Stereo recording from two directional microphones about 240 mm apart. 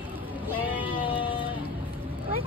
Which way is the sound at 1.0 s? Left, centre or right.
Left.